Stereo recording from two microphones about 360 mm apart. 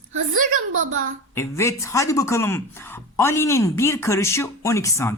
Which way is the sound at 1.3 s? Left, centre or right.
Centre.